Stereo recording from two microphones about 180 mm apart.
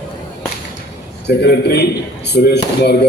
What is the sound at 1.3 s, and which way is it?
Speech, 65° left (ahead or behind).